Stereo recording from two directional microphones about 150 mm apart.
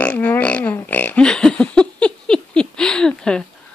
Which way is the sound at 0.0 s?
10° left (ahead or behind).